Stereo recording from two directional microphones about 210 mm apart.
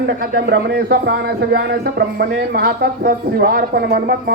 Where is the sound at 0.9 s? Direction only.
50° right (ahead or behind).